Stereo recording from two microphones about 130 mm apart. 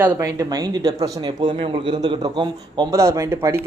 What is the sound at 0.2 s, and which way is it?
Speech, 30° right (ahead or behind).